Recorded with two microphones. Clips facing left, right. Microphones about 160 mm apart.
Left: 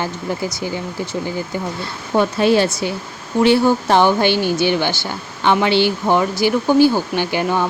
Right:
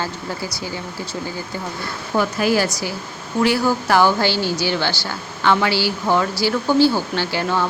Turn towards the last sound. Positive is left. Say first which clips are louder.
# left 3 dB
turn(degrees=15)  # may be behind; listen again after turning